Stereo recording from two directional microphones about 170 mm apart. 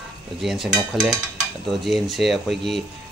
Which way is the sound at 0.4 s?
Centre (ahead or behind).